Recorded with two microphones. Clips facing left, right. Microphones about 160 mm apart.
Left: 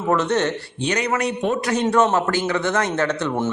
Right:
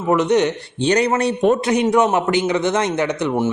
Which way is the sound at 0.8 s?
35° right (ahead or behind).